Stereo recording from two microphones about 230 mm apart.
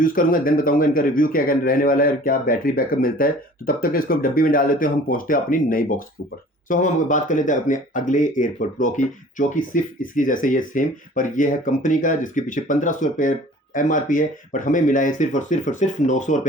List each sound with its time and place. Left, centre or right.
0.0 s speech: left